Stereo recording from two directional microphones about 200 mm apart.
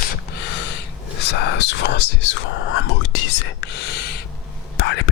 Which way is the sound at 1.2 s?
60° left (ahead or behind).